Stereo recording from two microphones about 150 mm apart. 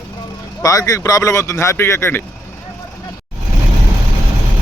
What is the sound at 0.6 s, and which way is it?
Speech, 20° left (ahead or behind).